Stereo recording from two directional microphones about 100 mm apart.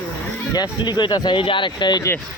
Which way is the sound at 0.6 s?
45° left (ahead or behind).